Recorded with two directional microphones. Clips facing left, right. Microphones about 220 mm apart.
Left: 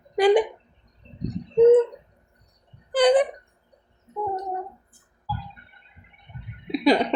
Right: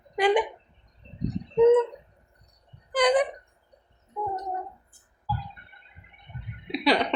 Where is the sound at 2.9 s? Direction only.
30° left (ahead or behind).